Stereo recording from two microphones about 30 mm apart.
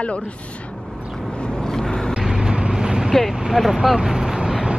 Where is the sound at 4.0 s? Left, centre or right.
Right.